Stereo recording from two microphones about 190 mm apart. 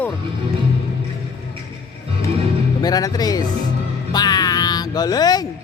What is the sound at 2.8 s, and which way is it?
Speech, 20° left (ahead or behind).